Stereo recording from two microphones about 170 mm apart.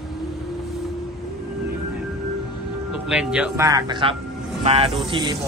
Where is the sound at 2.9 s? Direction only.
5° right (ahead or behind).